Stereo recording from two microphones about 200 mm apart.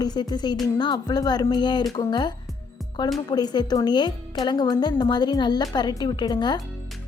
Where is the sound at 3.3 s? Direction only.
20° left (ahead or behind).